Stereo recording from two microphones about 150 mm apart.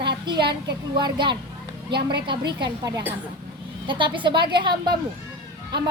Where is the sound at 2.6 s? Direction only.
25° right (ahead or behind).